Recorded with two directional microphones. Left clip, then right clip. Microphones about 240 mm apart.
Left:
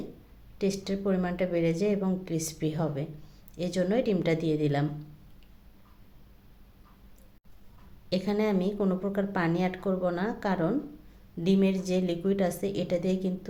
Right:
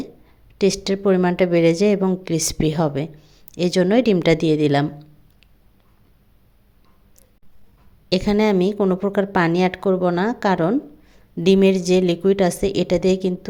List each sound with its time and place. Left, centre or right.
0.6 s a woman's voice: right
8.1 s a woman's voice: right